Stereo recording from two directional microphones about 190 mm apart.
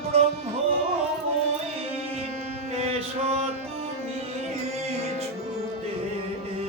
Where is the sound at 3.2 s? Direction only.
35° right (ahead or behind).